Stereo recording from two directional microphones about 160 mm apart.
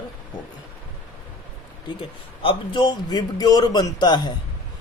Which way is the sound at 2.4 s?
30° left (ahead or behind).